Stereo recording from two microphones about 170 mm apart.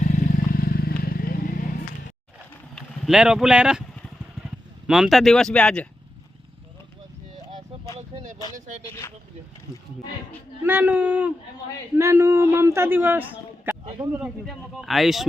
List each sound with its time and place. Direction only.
0.0 s vehicle: 50° left (ahead or behind)
2.7 s speech: 5° right (ahead or behind)
4.9 s speech: centre (ahead or behind)
7.9 s a sound: 45° right (ahead or behind)
10.6 s a man's voice: 10° right (ahead or behind)
14.4 s speech: centre (ahead or behind)